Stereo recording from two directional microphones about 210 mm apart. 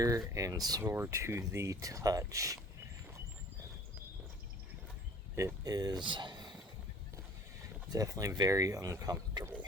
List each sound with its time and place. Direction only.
0.0 s speech: 15° right (ahead or behind)
5.4 s speech: 15° right (ahead or behind)
7.9 s speech: 15° right (ahead or behind)